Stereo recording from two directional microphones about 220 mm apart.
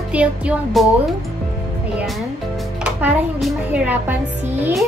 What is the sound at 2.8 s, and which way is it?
Speech, 5° right (ahead or behind).